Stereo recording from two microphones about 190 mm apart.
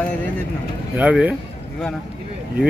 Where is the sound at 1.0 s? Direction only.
5° right (ahead or behind).